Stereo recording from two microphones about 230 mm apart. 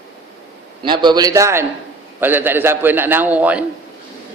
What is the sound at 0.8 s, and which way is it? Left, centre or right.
A man's voice, centre.